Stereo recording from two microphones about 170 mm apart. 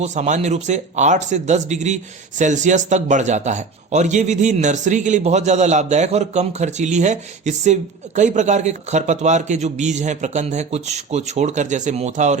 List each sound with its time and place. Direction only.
0.0 s a man's voice: 45° right (ahead or behind)